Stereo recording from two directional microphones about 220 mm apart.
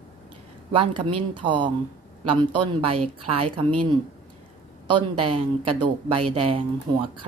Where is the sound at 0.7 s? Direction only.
25° right (ahead or behind).